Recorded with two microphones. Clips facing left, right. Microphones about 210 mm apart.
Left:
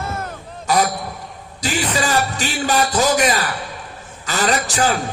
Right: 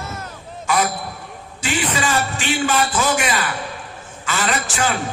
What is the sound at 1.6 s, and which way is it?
A man's voice, 40° left (ahead or behind).